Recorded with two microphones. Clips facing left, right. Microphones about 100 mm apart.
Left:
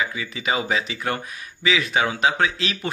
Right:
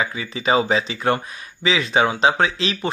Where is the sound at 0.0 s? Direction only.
35° right (ahead or behind).